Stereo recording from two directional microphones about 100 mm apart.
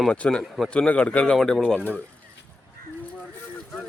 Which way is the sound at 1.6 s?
15° left (ahead or behind).